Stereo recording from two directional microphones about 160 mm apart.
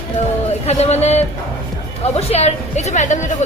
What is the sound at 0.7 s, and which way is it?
Speech, 45° left (ahead or behind).